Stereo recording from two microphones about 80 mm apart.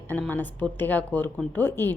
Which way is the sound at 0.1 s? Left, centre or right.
Left.